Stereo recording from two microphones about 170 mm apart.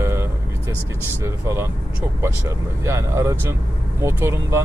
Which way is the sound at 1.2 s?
15° right (ahead or behind).